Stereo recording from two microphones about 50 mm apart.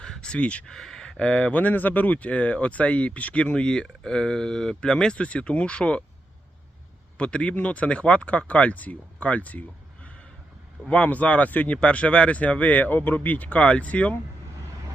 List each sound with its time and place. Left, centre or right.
0.0 s a sound: centre
0.6 s speech: centre
1.3 s speech: left
7.2 s speech: left